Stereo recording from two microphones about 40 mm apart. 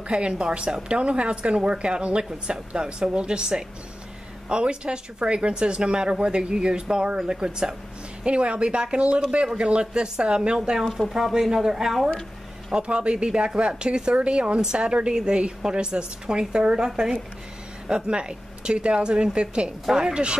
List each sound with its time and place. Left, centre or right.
0.2 s speech: right
10.9 s speech: centre
12.1 s a sound: centre
12.7 s speech: right